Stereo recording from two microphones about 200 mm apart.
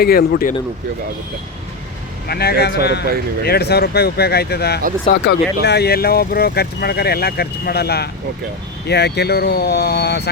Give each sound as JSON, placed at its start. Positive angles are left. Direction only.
{"t": 0.0, "sound": "speech", "side_deg": 50}
{"t": 2.2, "sound": "speech", "side_deg": 50}